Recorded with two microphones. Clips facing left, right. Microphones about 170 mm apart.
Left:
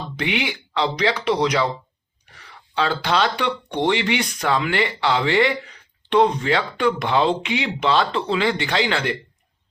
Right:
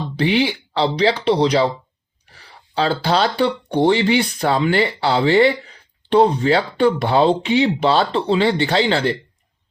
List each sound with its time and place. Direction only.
0.2 s speech: 35° right (ahead or behind)